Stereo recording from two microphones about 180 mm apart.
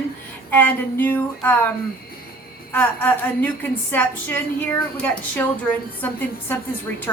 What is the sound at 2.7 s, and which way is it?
A woman's voice, 10° left (ahead or behind).